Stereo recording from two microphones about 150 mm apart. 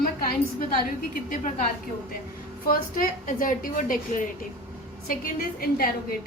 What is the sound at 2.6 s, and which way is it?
A woman's voice, 70° left (ahead or behind).